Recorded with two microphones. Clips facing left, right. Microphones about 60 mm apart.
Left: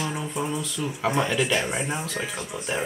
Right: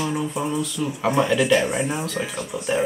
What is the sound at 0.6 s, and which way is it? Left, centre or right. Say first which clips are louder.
Speech: right 4 dB; centre.